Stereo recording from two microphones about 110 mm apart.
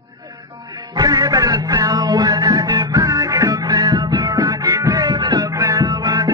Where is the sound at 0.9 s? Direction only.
40° right (ahead or behind).